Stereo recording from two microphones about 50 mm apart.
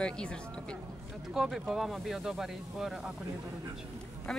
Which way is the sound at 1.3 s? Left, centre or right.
Centre.